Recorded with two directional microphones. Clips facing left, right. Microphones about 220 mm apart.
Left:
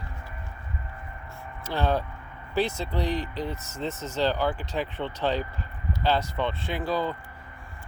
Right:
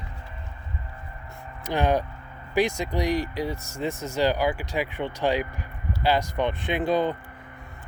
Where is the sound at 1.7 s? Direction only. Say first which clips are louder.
Right 3 dB; 15° right (ahead or behind).